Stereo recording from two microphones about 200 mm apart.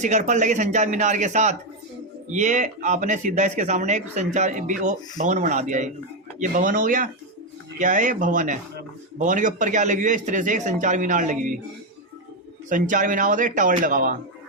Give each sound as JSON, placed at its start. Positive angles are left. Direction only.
{"t": 0.0, "sound": "a man's voice", "side_deg": -35}
{"t": 12.6, "sound": "a man's voice", "side_deg": -40}